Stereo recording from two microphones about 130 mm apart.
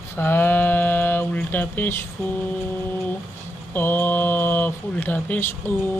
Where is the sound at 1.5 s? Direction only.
15° left (ahead or behind).